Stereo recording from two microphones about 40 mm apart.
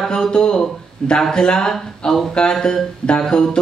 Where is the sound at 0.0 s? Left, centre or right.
Centre.